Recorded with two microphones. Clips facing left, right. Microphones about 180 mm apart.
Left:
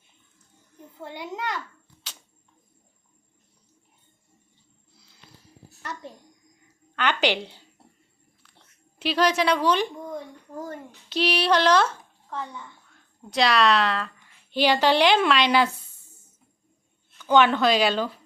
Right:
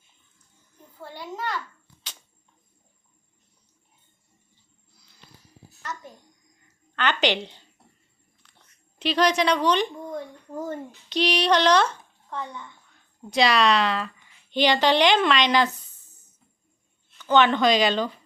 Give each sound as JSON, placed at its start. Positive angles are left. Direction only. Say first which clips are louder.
{"t": 0.9, "sound": "a child's voice", "louder": "left 1 dB", "side_deg": 20}
{"t": 5.8, "sound": "a sound", "louder": "even", "side_deg": 30}
{"t": 6.9, "sound": "a woman's voice", "louder": "even", "side_deg": 10}
{"t": 17.2, "sound": "speech", "louder": "even", "side_deg": 10}